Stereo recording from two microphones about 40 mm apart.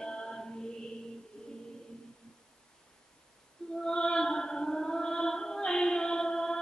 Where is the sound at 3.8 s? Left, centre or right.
Centre.